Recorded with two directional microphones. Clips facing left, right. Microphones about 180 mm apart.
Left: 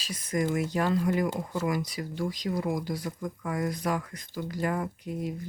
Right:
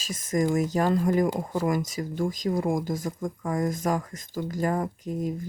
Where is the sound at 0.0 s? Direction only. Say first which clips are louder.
Right 4 dB; 45° right (ahead or behind).